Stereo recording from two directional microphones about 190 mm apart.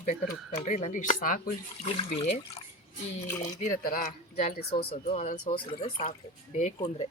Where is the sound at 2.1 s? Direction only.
30° left (ahead or behind).